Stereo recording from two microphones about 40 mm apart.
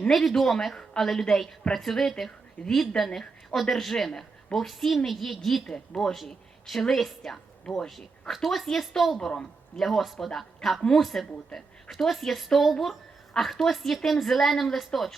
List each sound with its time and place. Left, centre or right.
0.1 s speech: centre
5.6 s speech: centre
6.0 s speech: centre